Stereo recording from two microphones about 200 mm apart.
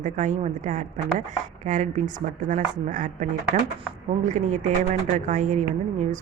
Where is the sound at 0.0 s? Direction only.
35° right (ahead or behind).